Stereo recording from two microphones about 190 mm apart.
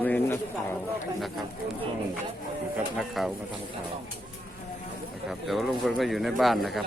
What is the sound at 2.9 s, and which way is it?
Speech, centre (ahead or behind).